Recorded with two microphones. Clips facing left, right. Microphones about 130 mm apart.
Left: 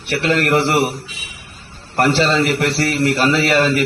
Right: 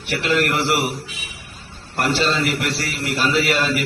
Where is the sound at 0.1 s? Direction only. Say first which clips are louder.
Left 4 dB; 60° left (ahead or behind).